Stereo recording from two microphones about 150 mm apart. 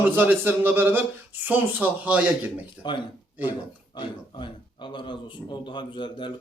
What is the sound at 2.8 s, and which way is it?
Speech, 30° left (ahead or behind).